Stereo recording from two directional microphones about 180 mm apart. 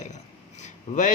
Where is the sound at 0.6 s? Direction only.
40° left (ahead or behind).